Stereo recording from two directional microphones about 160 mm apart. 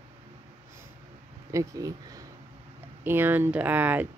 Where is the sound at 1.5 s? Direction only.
20° right (ahead or behind).